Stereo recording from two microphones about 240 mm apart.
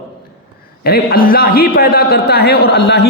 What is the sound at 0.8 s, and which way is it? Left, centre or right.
A man's voice, left.